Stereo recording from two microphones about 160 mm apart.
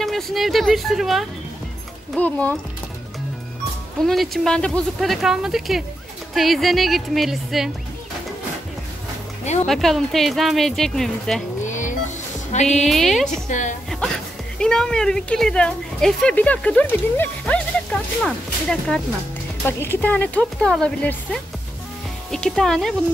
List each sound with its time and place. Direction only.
0.0 s a woman's voice: centre (ahead or behind)
4.0 s speech: centre (ahead or behind)
9.7 s speech: centre (ahead or behind)
11.6 s music: 50° left (ahead or behind)
12.7 s speech: centre (ahead or behind)
13.5 s a woman's voice: 50° left (ahead or behind)
13.8 s music: 5° left (ahead or behind)
14.6 s a woman's voice: 5° left (ahead or behind)